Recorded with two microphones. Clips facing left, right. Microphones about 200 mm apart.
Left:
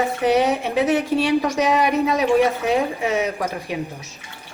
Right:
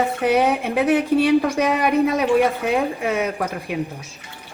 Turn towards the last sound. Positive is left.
turn(degrees=-55)  # may be behind; listen again after turning